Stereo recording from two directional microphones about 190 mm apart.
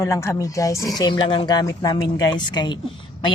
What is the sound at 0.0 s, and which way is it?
Speech, 15° left (ahead or behind).